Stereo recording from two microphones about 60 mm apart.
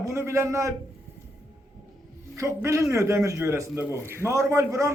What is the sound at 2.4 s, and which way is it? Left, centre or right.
A man's voice, right.